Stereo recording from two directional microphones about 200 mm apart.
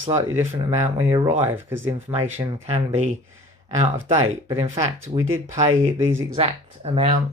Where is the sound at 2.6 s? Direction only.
35° right (ahead or behind).